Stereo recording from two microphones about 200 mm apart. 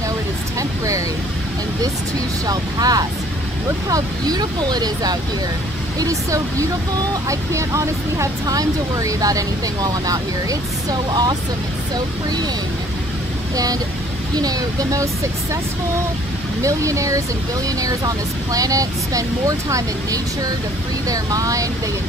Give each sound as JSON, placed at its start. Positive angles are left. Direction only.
{"t": 0.6, "sound": "vehicle", "side_deg": -15}
{"t": 2.4, "sound": "speech", "side_deg": -20}
{"t": 14.3, "sound": "speech", "side_deg": -20}
{"t": 16.6, "sound": "speech", "side_deg": -15}